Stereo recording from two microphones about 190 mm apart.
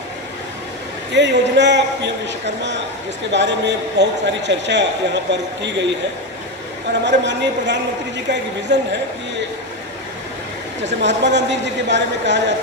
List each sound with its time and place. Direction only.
1.1 s a man's voice: 70° right (ahead or behind)
3.3 s a man's voice: 70° right (ahead or behind)
7.1 s a man's voice: 70° right (ahead or behind)
11.0 s a man's voice: 70° right (ahead or behind)